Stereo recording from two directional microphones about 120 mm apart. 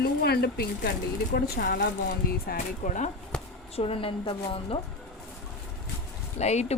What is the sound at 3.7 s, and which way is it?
A woman's voice, 55° left (ahead or behind).